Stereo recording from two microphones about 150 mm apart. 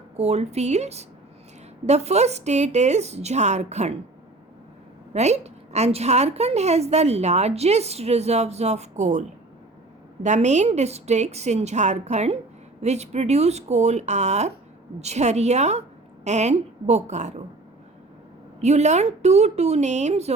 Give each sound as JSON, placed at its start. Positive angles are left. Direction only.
{"t": 0.2, "sound": "a woman's voice", "side_deg": -45}
{"t": 5.1, "sound": "a woman's voice", "side_deg": -50}
{"t": 10.2, "sound": "a woman's voice", "side_deg": -50}
{"t": 18.6, "sound": "a woman's voice", "side_deg": -50}